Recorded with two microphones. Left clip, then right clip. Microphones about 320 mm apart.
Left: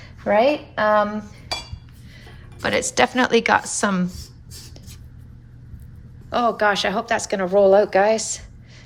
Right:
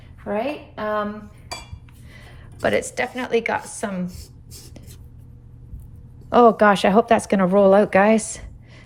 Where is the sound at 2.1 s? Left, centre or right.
Centre.